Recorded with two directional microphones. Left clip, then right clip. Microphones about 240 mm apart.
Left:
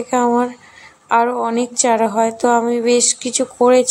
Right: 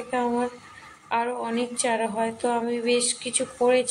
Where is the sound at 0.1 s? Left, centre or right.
Left.